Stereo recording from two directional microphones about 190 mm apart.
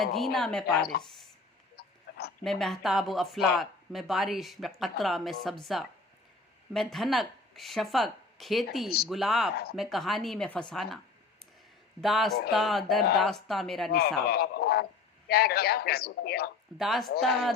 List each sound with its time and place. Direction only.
0.0 s speech: centre (ahead or behind)
0.8 s a man's voice: 55° left (ahead or behind)
1.7 s a sound: 55° left (ahead or behind)
2.4 s speech: centre (ahead or behind)
6.7 s speech: centre (ahead or behind)
14.3 s a man's voice: 55° left (ahead or behind)
16.7 s speech: centre (ahead or behind)